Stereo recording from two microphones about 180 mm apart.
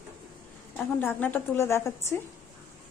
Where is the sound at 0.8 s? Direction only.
10° left (ahead or behind).